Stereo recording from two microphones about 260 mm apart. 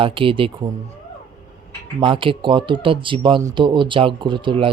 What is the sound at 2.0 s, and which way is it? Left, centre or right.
Speech, centre.